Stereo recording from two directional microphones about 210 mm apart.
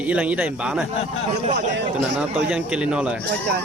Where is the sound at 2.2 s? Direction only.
5° right (ahead or behind).